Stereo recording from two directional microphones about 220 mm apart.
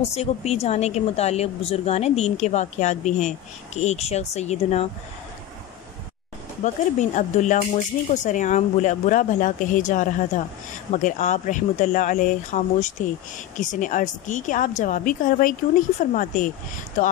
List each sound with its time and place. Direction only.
0.0 s speech: 30° left (ahead or behind)
6.6 s speech: 35° left (ahead or behind)